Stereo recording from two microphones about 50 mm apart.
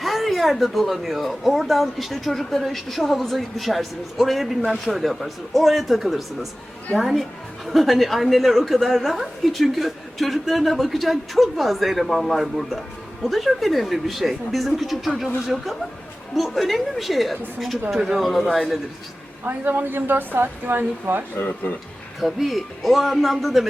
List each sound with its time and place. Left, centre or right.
0.0 s a woman's voice: centre
19.5 s a woman's voice: right
21.3 s speech: left
22.2 s a woman's voice: centre